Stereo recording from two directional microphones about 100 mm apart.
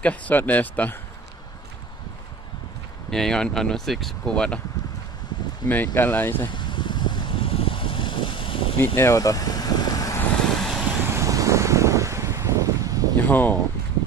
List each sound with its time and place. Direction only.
0.0 s speech: 15° left (ahead or behind)
3.1 s speech: 5° left (ahead or behind)
5.7 s speech: 20° left (ahead or behind)
6.4 s a sound: 55° left (ahead or behind)
8.7 s speech: 25° left (ahead or behind)
9.1 s vehicle: 35° left (ahead or behind)
10.4 s vehicle: 5° left (ahead or behind)
11.1 s wind: 30° right (ahead or behind)
13.2 s speech: 20° left (ahead or behind)